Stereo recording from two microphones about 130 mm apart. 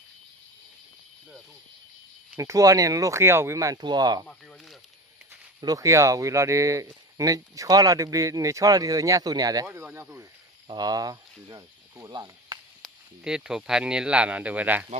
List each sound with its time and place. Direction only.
2.4 s speech: 25° right (ahead or behind)
5.5 s speech: 25° right (ahead or behind)
9.6 s speech: 10° right (ahead or behind)
10.7 s speech: 30° right (ahead or behind)
12.8 s speech: 5° right (ahead or behind)